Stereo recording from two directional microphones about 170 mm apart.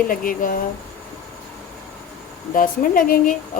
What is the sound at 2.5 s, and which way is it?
Speech, 55° left (ahead or behind).